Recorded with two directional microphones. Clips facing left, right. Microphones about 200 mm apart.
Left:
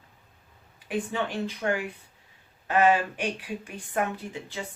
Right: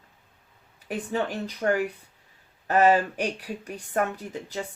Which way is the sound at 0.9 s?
40° right (ahead or behind).